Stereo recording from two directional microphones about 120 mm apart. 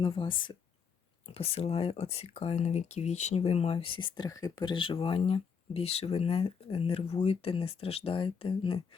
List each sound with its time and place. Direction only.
0.0 s speech: 45° left (ahead or behind)
4.3 s speech: 30° left (ahead or behind); by 8.8 s 50° left (ahead or behind)